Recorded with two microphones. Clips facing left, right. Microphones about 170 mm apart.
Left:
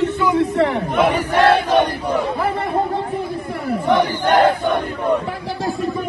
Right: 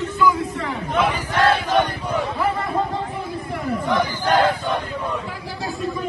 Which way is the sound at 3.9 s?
65° left (ahead or behind).